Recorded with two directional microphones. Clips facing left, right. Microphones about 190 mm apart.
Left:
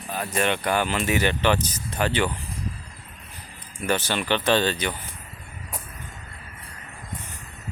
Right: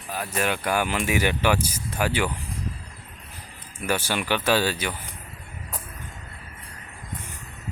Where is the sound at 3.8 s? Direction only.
10° right (ahead or behind).